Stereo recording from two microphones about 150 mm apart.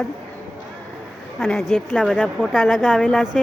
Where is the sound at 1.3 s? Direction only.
Centre (ahead or behind).